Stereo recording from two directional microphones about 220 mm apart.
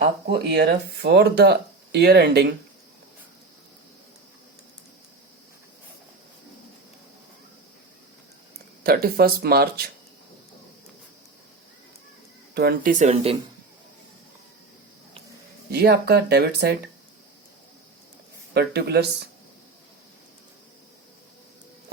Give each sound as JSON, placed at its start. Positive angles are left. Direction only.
{"t": 0.3, "sound": "speech", "side_deg": -50}
{"t": 8.8, "sound": "speech", "side_deg": -45}
{"t": 12.5, "sound": "speech", "side_deg": -40}
{"t": 15.7, "sound": "speech", "side_deg": -45}
{"t": 18.5, "sound": "speech", "side_deg": -45}